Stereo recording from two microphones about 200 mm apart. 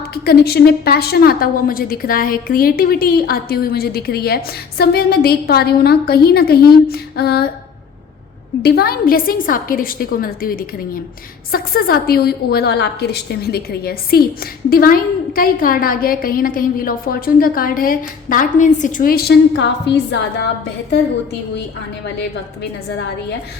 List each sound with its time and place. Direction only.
0.0 s a woman's voice: 50° left (ahead or behind)
8.6 s a woman's voice: 50° left (ahead or behind)